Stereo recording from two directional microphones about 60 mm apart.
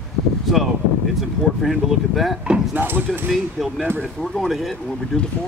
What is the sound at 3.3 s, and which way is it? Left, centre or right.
Speech, centre.